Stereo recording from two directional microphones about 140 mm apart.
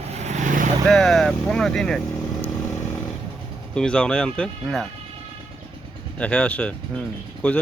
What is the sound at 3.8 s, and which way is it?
Speech, 5° left (ahead or behind).